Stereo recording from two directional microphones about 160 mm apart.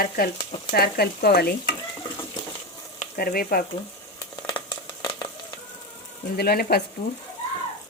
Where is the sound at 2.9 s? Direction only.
65° left (ahead or behind).